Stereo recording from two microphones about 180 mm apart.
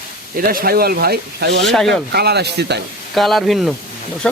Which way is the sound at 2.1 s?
65° right (ahead or behind).